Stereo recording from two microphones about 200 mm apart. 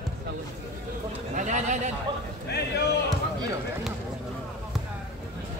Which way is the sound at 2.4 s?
55° left (ahead or behind).